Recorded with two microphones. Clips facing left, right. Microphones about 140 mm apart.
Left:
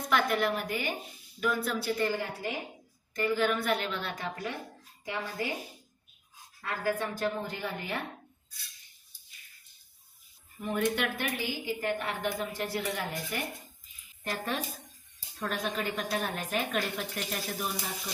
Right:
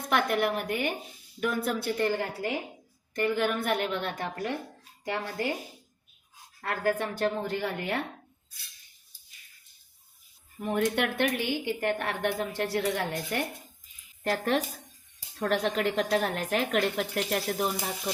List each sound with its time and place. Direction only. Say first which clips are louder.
0.1 s a woman's voice: right 2 dB; 55° right (ahead or behind)
5.0 s a woman's voice: right 3 dB; 65° right (ahead or behind)
6.6 s a woman's voice: right 4 dB; 55° right (ahead or behind)
7.2 s a woman's voice: right 4 dB; 65° right (ahead or behind)
10.8 s a woman's voice: right 4 dB; 60° right (ahead or behind)
14.3 s a woman's voice: right 7 dB; 90° right; by 17.8 s 65° right (ahead or behind)